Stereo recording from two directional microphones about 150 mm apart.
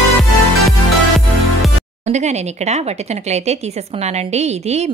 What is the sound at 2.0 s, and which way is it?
Speech, 50° right (ahead or behind).